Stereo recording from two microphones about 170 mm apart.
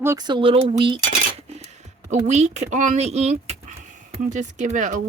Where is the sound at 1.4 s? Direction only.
40° right (ahead or behind).